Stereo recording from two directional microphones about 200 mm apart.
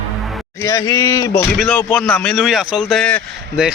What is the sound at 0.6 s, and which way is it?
Speech, 15° left (ahead or behind).